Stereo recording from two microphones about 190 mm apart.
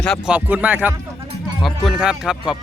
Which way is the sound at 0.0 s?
Centre (ahead or behind).